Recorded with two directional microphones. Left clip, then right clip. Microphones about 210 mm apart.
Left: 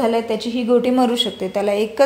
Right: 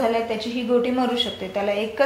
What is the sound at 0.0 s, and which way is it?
A woman's voice, 60° left (ahead or behind).